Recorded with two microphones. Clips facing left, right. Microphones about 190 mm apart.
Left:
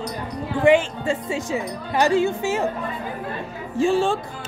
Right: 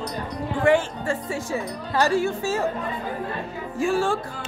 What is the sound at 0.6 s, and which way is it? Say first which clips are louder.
Speech: left 3 dB; 15° left (ahead or behind).